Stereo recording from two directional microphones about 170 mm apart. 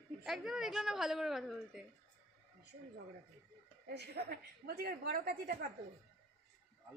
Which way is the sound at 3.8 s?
70° right (ahead or behind).